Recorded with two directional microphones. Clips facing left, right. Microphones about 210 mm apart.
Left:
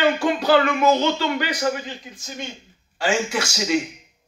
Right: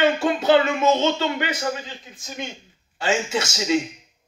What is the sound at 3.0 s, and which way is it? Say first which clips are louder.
Speech: left 1 dB; 25° right (ahead or behind).